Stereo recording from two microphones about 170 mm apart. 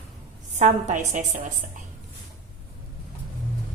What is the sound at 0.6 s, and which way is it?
Speech, 45° right (ahead or behind).